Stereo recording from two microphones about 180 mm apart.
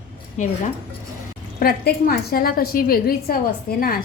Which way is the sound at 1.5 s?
55° left (ahead or behind).